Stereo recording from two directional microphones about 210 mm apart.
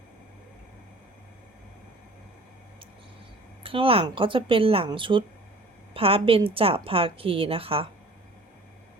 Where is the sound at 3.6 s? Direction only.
25° right (ahead or behind).